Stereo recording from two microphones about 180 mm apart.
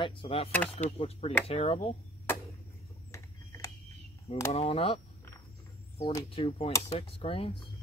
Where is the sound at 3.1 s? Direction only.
15° left (ahead or behind).